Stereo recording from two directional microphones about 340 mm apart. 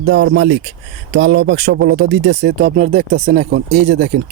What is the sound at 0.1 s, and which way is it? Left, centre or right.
Speech, right.